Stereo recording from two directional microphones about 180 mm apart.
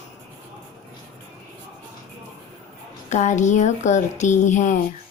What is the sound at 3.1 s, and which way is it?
Speech, 40° left (ahead or behind).